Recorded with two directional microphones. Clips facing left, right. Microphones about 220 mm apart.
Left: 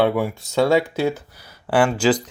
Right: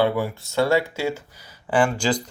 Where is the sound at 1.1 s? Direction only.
15° right (ahead or behind).